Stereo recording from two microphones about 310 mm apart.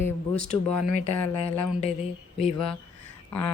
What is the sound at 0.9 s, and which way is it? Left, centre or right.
Speech, centre.